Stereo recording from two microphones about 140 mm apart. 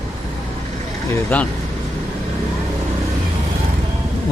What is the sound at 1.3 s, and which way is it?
Speech, 10° left (ahead or behind).